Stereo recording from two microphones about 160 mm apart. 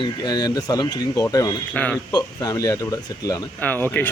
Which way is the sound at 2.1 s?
20° left (ahead or behind).